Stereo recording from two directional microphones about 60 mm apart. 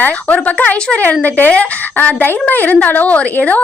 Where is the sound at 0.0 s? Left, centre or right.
Left.